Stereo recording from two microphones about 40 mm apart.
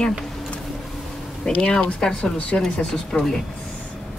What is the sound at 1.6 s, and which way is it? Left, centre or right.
A woman's voice, left.